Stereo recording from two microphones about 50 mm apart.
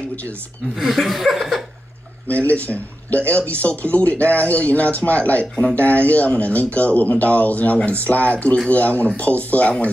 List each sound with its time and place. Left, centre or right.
0.7 s chuckle: centre
2.2 s speech: left